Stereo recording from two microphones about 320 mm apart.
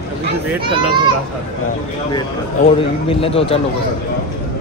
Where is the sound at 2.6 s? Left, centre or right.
Centre.